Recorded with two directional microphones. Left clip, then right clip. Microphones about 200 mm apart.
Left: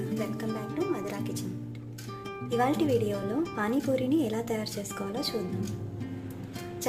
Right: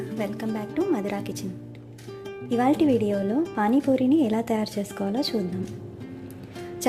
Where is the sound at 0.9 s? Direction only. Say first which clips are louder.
Right 5 dB; 35° right (ahead or behind).